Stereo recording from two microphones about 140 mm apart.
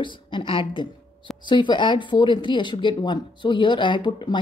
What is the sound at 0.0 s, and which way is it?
Speech, 35° left (ahead or behind).